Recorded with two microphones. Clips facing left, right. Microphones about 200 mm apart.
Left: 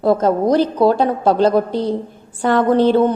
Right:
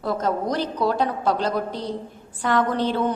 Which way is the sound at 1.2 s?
30° left (ahead or behind).